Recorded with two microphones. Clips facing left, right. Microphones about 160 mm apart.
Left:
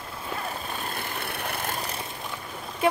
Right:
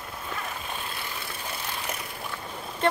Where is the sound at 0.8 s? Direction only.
55° left (ahead or behind).